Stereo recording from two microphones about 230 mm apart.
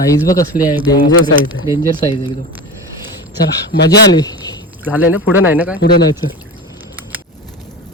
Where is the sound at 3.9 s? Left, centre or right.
Centre.